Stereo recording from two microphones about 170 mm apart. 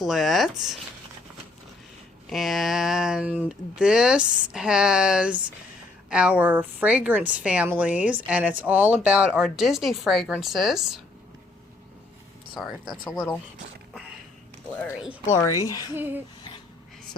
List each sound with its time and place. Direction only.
0.0 s speech: centre (ahead or behind)
2.3 s a woman's voice: centre (ahead or behind)
15.3 s speech: 20° left (ahead or behind)
16.0 s a woman's voice: 10° right (ahead or behind)